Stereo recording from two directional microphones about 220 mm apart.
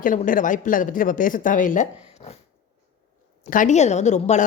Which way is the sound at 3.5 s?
35° left (ahead or behind).